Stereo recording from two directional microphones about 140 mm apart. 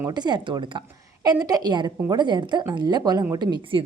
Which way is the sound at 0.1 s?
30° right (ahead or behind).